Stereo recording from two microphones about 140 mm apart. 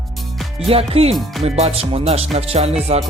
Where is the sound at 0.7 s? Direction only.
45° right (ahead or behind).